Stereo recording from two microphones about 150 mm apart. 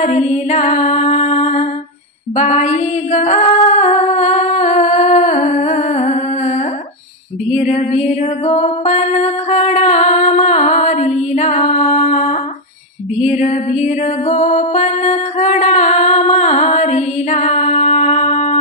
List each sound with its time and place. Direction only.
0.0 s music: 50° left (ahead or behind)
7.5 s music: 50° left (ahead or behind)